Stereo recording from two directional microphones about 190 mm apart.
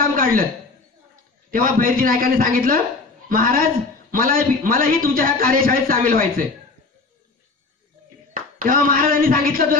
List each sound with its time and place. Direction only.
0.0 s a sound: 50° right (ahead or behind)
1.5 s a man's voice: 50° right (ahead or behind)
8.3 s speech: 45° right (ahead or behind)